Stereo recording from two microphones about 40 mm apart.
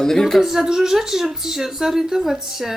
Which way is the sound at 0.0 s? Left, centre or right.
Centre.